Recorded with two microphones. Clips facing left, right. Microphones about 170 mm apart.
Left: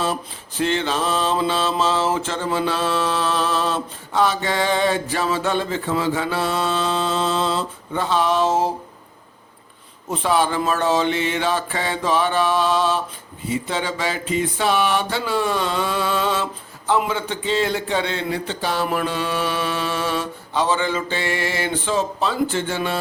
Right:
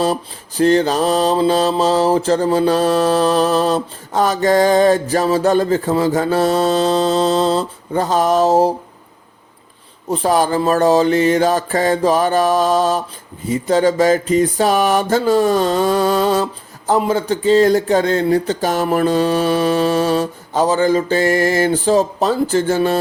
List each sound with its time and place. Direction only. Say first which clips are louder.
0.0 s mantra: right 6 dB; 40° right (ahead or behind)
10.1 s mantra: right 5 dB; 40° right (ahead or behind)